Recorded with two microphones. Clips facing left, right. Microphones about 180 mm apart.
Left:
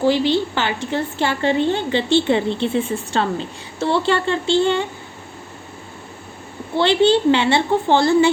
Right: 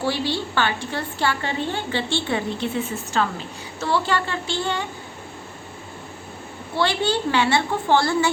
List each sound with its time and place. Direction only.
0.0 s a woman's voice: 20° left (ahead or behind)
6.7 s a woman's voice: 25° left (ahead or behind)